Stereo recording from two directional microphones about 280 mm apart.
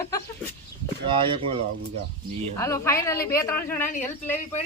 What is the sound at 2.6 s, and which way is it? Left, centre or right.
A woman's voice, centre.